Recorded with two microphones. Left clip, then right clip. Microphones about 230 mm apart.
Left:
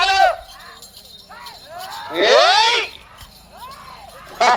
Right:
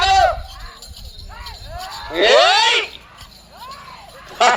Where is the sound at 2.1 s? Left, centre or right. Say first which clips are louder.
Right 1 dB; right.